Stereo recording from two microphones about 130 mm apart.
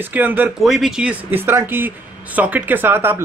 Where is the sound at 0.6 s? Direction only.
Centre (ahead or behind).